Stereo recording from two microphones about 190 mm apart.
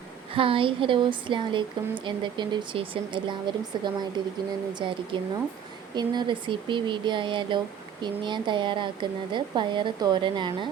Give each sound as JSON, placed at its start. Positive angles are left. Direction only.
{"t": 0.3, "sound": "speech", "side_deg": -30}